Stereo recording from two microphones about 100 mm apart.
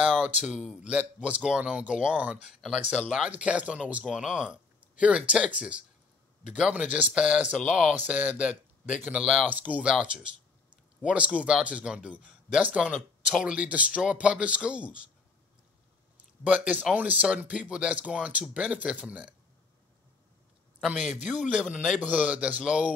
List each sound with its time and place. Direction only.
0.2 s speech: 10° right (ahead or behind)
11.0 s speech: 10° right (ahead or behind)
16.2 s speech: 15° right (ahead or behind)
20.8 s speech: 10° right (ahead or behind)